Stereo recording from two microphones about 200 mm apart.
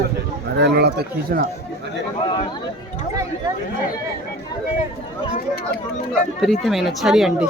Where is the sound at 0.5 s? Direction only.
55° right (ahead or behind).